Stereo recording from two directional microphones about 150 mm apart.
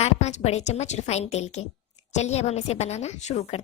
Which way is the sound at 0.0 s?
50° left (ahead or behind).